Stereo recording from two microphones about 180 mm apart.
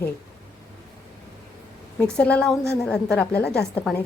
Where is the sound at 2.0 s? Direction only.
5° left (ahead or behind).